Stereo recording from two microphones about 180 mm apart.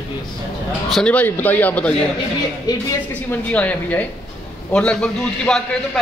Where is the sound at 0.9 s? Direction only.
5° left (ahead or behind).